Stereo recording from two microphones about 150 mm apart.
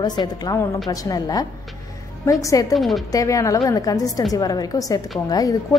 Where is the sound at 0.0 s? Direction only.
25° left (ahead or behind).